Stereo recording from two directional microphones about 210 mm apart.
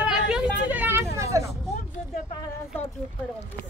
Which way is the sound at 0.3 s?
5° right (ahead or behind).